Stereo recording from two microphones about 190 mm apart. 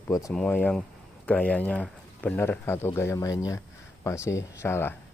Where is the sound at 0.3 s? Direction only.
5° left (ahead or behind).